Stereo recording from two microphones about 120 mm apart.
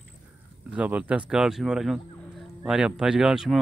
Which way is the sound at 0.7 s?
10° right (ahead or behind).